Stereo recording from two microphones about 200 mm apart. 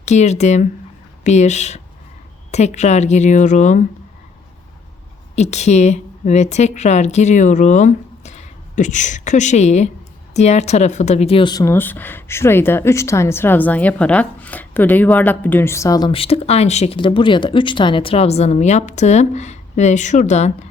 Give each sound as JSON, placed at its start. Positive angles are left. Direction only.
{"t": 0.0, "sound": "speech", "side_deg": 35}
{"t": 5.4, "sound": "a woman's voice", "side_deg": 35}